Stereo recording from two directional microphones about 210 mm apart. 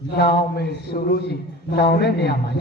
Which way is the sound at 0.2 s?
50° left (ahead or behind).